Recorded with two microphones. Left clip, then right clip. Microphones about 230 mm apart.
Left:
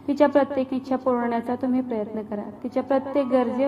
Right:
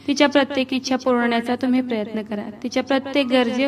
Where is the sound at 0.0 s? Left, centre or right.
Right.